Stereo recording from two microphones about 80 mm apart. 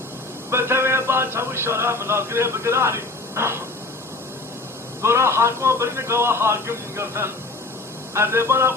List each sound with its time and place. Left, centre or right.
0.5 s speech: right
5.0 s speech: right